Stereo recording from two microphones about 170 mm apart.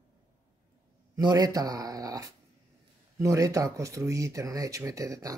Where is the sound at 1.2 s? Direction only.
20° right (ahead or behind).